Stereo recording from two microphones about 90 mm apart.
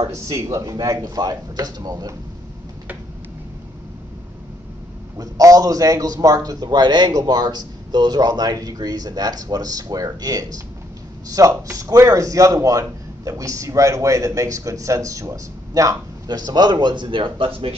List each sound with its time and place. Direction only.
0.0 s a man's voice: 35° right (ahead or behind)
5.1 s a man's voice: 40° right (ahead or behind); by 17.7 s 85° right